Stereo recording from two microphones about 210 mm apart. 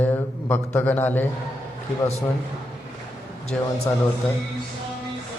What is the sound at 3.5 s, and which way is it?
Speech, 5° left (ahead or behind).